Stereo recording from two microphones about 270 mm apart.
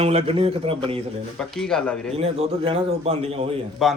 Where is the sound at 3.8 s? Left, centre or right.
Centre.